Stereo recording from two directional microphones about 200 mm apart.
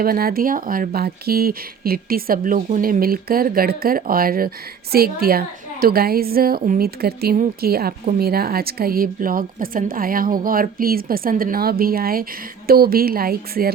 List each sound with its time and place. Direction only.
0.0 s speech: 45° right (ahead or behind)